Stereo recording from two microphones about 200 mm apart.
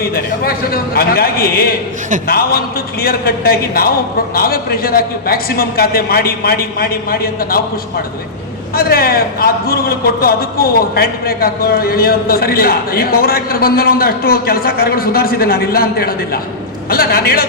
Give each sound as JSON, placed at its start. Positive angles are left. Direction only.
{"t": 0.0, "sound": "a man's voice", "side_deg": 50}
{"t": 3.0, "sound": "a man's voice", "side_deg": 50}
{"t": 8.7, "sound": "a man's voice", "side_deg": 50}